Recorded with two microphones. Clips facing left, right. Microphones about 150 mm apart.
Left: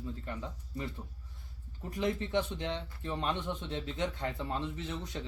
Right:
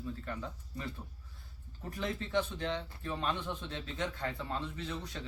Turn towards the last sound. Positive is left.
turn(degrees=20)  # may be behind; listen again after turning